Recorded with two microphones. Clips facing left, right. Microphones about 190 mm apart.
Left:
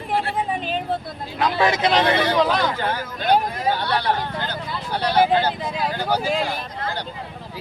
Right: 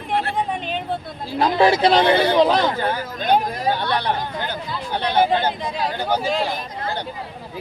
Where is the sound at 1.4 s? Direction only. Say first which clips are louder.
Right 4 dB; 30° right (ahead or behind).